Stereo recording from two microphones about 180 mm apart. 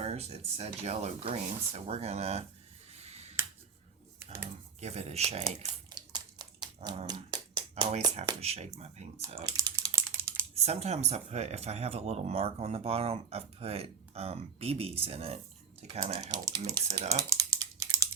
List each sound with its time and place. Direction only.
0.0 s speech: 35° right (ahead or behind)
2.9 s finger snapping: 35° right (ahead or behind)
4.2 s computer keyboard: 15° right (ahead or behind)
4.8 s speech: 35° right (ahead or behind)
5.9 s dog: 25° right (ahead or behind)
7.1 s a sound: 25° right (ahead or behind)
8.4 s speech: 35° right (ahead or behind)
9.4 s typing: 20° right (ahead or behind)
10.5 s speech: 35° right (ahead or behind)
16.2 s speech: 20° right (ahead or behind)
17.1 s typing: 20° right (ahead or behind)